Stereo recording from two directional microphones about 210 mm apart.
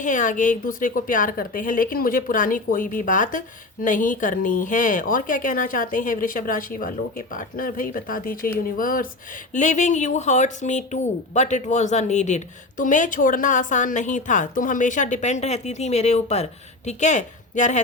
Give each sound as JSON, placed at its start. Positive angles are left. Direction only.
{"t": 0.0, "sound": "a woman's voice", "side_deg": 35}